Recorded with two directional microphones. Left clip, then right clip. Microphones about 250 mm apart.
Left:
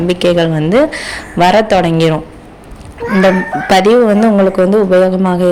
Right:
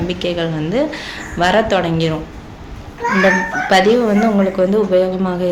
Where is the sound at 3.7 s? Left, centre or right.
Left.